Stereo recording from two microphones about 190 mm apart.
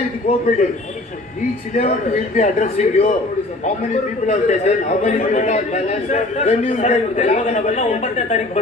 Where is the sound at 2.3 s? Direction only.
40° left (ahead or behind).